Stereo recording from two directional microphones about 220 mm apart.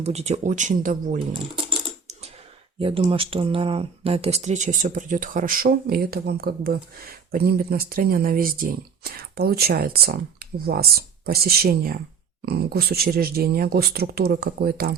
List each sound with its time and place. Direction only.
0.0 s speech: 30° right (ahead or behind)
2.7 s speech: 25° right (ahead or behind); by 14.9 s 45° right (ahead or behind)